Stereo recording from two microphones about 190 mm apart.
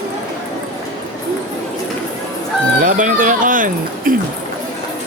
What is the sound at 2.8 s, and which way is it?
Speech, 45° right (ahead or behind).